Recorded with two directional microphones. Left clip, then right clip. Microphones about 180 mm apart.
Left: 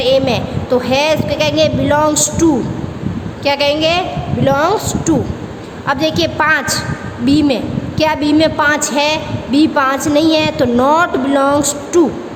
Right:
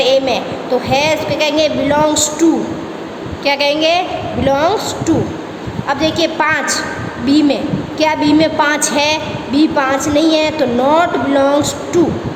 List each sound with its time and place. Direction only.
0.0 s a woman's voice: 30° left (ahead or behind)